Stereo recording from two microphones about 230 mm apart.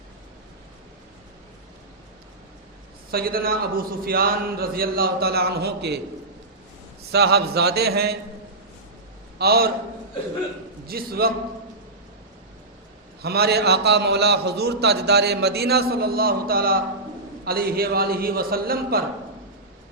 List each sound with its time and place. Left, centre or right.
3.1 s a man's voice: right
7.1 s a man's voice: right
9.4 s a man's voice: right
10.8 s a man's voice: right
13.2 s a man's voice: right